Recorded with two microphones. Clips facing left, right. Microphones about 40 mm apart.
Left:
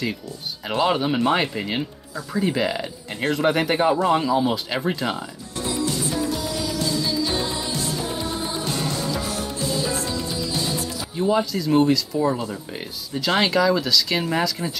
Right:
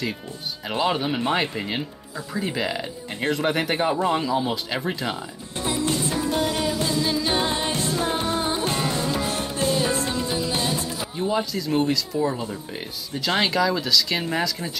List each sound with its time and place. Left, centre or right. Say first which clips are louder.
0.7 s speech: left 3 dB; centre
5.7 s music: right 1 dB; right
11.1 s speech: left 4 dB; centre
13.4 s speech: left 3 dB; centre